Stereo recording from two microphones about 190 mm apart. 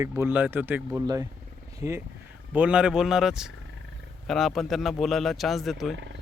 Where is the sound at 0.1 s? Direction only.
10° right (ahead or behind).